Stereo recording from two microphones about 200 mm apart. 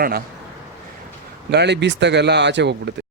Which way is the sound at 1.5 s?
55° right (ahead or behind).